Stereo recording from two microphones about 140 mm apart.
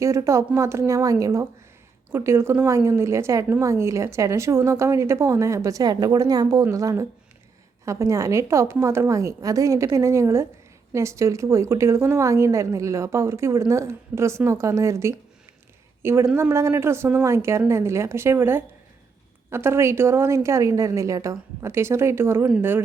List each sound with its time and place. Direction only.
0.0 s a woman's voice: 20° right (ahead or behind)